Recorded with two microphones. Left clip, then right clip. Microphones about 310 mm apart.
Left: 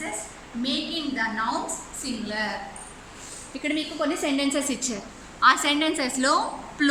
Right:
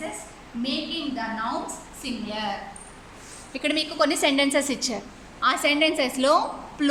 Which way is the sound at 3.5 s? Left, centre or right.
Right.